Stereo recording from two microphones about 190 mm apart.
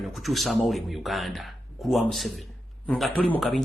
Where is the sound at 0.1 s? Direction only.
Centre (ahead or behind).